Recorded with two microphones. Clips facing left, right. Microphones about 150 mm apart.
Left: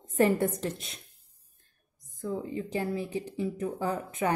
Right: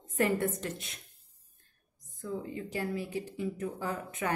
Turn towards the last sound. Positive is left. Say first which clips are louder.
# left 5 dB
turn(degrees=30)  # may be behind; listen again after turning